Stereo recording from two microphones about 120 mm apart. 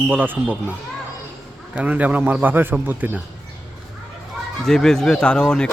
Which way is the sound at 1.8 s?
15° right (ahead or behind).